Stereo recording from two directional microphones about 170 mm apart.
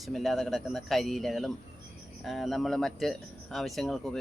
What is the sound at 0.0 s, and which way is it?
Speech, centre (ahead or behind).